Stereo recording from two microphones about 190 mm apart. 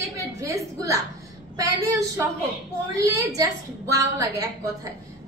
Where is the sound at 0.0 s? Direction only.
15° right (ahead or behind).